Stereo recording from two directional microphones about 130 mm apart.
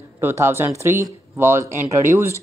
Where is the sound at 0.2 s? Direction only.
20° right (ahead or behind).